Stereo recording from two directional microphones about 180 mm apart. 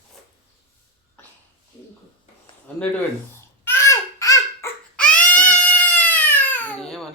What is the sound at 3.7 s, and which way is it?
Babbling, 15° left (ahead or behind).